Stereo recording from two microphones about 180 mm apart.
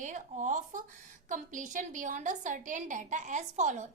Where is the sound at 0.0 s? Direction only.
45° right (ahead or behind).